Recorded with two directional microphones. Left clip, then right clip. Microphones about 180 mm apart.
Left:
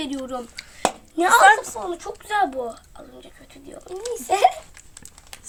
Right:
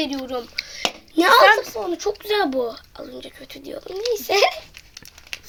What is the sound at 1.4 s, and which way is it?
Speech, centre (ahead or behind).